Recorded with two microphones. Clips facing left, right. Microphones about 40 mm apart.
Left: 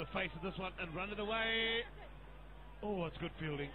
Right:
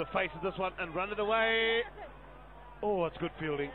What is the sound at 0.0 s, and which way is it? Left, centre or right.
A man's voice, centre.